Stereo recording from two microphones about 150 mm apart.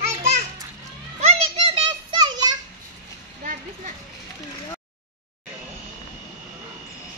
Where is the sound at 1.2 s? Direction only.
45° right (ahead or behind); by 2.6 s 30° right (ahead or behind).